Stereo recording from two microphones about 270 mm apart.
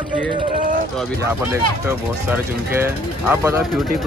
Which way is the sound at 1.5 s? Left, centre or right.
Centre.